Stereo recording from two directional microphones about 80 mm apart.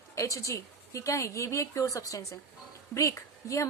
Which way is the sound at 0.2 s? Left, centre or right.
Left.